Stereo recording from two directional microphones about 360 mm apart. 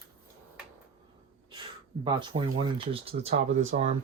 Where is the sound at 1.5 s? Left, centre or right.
Centre.